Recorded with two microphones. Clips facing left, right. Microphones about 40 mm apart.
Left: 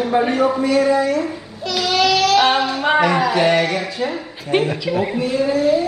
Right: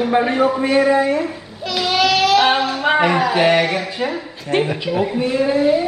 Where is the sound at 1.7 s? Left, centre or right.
Centre.